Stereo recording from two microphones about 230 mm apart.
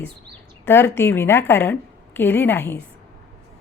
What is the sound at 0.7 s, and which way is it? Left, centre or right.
A woman's voice, centre.